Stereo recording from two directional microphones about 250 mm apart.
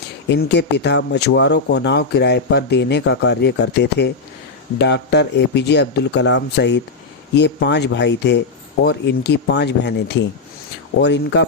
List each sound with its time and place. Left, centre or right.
0.3 s speech: left